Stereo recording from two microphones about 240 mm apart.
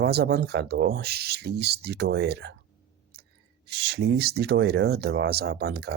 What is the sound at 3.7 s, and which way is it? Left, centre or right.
Speech, right.